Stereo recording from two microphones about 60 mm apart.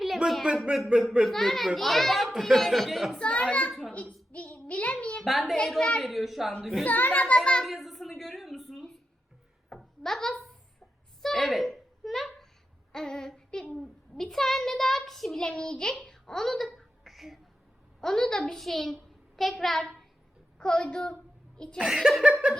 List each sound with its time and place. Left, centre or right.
0.5 s a child's voice: centre
3.2 s a child's voice: centre
3.7 s a child's voice: centre
3.9 s a sound: left
5.2 s a child's voice: centre
5.5 s a child's voice: centre
6.0 s a child's voice: centre
6.8 s a child's voice: left
7.6 s a woman's voice: centre
9.6 s a sound: centre
12.9 s a child's voice: centre
15.4 s a child's voice: centre
21.8 s speech: centre
22.2 s a sound: centre